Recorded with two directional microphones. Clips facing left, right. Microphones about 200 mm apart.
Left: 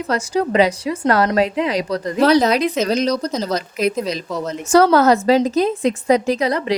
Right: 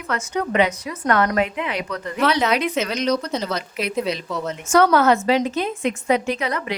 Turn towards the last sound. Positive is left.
turn(degrees=35)  # may be behind; listen again after turning